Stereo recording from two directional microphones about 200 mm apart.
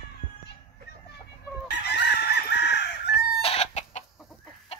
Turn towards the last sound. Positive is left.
turn(degrees=30)  # may be behind; listen again after turning